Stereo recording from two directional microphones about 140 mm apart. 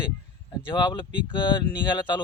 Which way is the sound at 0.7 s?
35° left (ahead or behind).